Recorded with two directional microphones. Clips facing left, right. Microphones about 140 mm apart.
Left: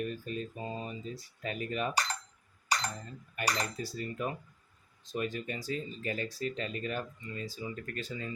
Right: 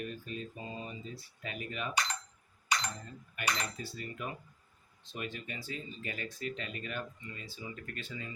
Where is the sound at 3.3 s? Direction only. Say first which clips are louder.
Left 3 dB; 40° left (ahead or behind).